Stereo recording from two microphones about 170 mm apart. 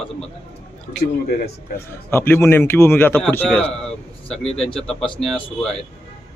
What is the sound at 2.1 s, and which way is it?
A man's voice, 15° left (ahead or behind).